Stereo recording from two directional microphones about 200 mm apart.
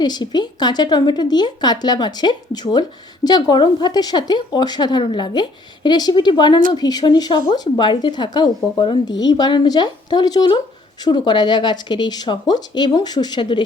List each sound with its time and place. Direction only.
0.0 s speech: 20° left (ahead or behind)